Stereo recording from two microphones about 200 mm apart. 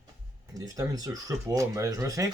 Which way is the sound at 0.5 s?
15° right (ahead or behind).